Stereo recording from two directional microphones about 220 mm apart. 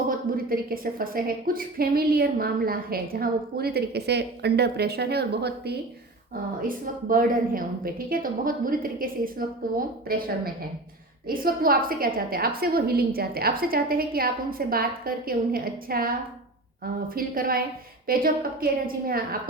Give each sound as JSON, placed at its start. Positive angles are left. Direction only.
{"t": 0.1, "sound": "a woman's voice", "side_deg": -40}